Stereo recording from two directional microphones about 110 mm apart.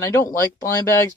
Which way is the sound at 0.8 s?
30° left (ahead or behind).